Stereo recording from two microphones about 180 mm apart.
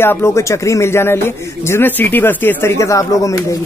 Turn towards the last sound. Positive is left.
turn(degrees=20)  # may be behind; listen again after turning